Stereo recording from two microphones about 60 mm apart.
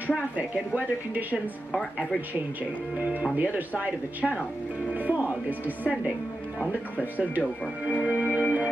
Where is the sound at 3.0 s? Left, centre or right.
Right.